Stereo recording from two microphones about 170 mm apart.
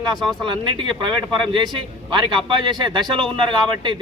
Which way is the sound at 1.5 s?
25° right (ahead or behind).